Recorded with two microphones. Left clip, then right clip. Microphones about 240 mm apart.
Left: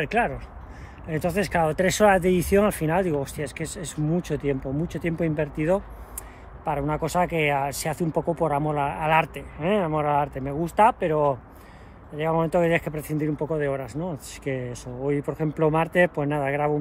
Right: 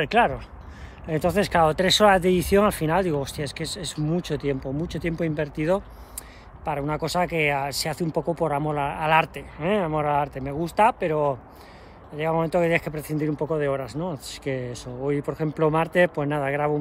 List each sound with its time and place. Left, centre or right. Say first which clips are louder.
0.0 s speech: right 4 dB; centre